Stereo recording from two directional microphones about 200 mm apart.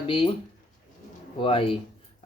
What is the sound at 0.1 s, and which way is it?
Speech, 25° left (ahead or behind).